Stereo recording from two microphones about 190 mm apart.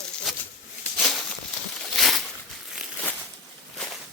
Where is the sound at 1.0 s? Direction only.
Centre (ahead or behind).